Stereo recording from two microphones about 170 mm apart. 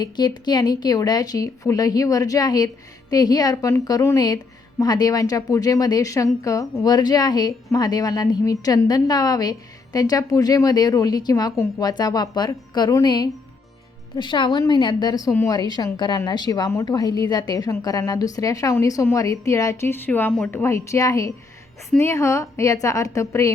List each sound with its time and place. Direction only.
0.0 s a woman's voice: 25° left (ahead or behind)